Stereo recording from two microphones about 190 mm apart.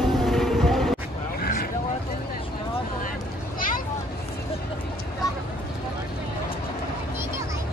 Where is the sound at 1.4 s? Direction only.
50° left (ahead or behind).